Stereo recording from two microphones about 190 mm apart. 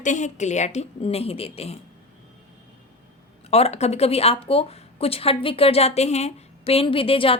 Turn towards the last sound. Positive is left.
turn(degrees=30)  # may be behind; listen again after turning